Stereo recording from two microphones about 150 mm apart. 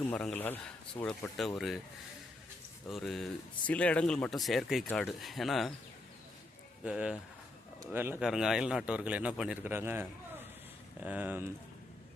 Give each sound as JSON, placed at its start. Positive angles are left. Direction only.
{"t": 0.0, "sound": "speech", "side_deg": 5}
{"t": 2.8, "sound": "speech", "side_deg": 0}
{"t": 6.8, "sound": "speech", "side_deg": -5}
{"t": 8.2, "sound": "a man's voice", "side_deg": -5}